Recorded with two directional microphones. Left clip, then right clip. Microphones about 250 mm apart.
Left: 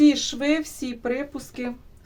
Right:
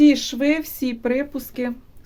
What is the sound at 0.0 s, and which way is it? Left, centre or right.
A woman's voice, right.